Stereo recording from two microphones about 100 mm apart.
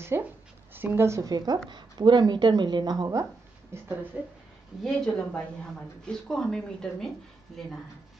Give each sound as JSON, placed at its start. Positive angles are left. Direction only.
{"t": 0.1, "sound": "speech", "side_deg": -25}
{"t": 1.3, "sound": "speech", "side_deg": -45}
{"t": 3.7, "sound": "speech", "side_deg": -25}
{"t": 4.1, "sound": "speech", "side_deg": -10}
{"t": 4.8, "sound": "a woman's voice", "side_deg": 10}